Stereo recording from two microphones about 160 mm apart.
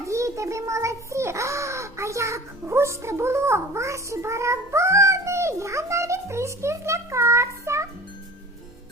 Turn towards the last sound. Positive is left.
turn(degrees=-20)  # may be behind; listen again after turning